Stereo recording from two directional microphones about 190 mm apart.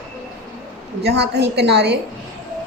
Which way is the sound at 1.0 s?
60° right (ahead or behind).